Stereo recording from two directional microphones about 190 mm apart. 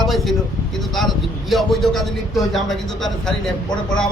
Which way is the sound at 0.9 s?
Centre (ahead or behind).